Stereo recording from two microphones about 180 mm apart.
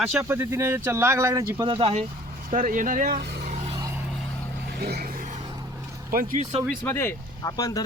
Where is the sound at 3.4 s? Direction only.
40° right (ahead or behind).